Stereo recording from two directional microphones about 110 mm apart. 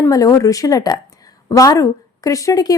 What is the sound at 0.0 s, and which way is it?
A woman's voice, 30° left (ahead or behind).